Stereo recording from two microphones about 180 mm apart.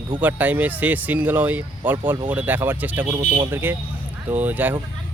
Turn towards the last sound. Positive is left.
turn(degrees=-10)  # may be behind; listen again after turning